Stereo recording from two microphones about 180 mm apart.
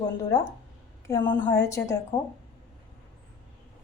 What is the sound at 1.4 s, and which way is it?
Speech, 15° left (ahead or behind).